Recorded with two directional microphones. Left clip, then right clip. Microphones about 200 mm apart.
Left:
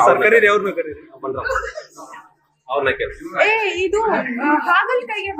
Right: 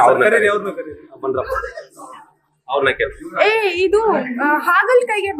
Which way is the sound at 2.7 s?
55° right (ahead or behind).